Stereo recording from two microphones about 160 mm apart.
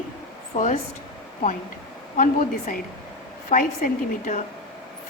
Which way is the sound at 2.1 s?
55° left (ahead or behind).